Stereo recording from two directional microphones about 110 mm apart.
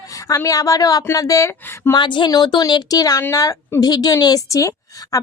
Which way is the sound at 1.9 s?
45° left (ahead or behind).